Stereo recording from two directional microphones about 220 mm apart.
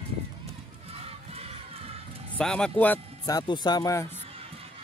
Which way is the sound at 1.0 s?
25° right (ahead or behind).